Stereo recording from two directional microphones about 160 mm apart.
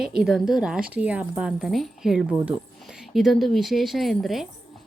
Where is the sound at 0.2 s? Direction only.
Centre (ahead or behind).